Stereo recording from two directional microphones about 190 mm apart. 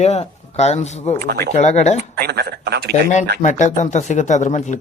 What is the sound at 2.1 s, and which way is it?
Speech, 55° right (ahead or behind).